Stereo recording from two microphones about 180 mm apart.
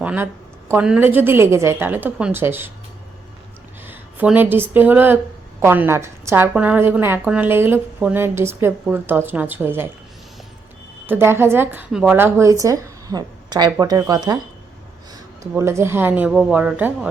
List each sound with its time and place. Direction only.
0.0 s a woman's voice: 10° right (ahead or behind)
3.8 s a woman's voice: 10° right (ahead or behind)
11.0 s a woman's voice: 10° right (ahead or behind)